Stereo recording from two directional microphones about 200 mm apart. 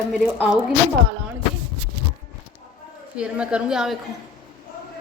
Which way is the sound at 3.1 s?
5° right (ahead or behind).